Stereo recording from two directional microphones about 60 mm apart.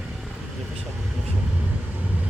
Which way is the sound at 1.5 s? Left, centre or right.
Right.